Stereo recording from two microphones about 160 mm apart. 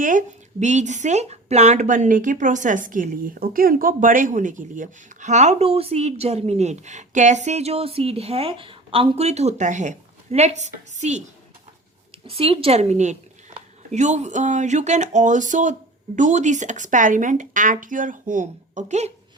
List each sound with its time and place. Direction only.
0.0 s a woman's voice: 55° right (ahead or behind)
12.2 s a woman's voice: 35° right (ahead or behind)